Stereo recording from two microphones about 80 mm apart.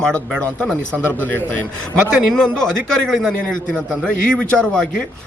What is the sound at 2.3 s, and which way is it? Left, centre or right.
A man's voice, centre.